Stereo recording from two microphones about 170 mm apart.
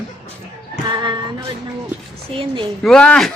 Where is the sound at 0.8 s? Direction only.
25° right (ahead or behind).